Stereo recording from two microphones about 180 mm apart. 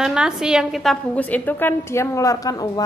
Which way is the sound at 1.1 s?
10° left (ahead or behind).